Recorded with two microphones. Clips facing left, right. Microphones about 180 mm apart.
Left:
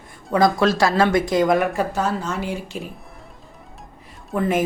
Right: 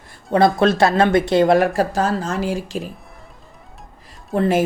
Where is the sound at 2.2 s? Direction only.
90° right.